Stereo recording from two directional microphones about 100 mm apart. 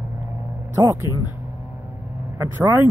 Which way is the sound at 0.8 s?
30° right (ahead or behind).